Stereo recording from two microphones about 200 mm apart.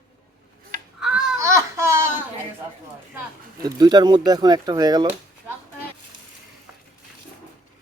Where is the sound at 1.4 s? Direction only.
15° right (ahead or behind).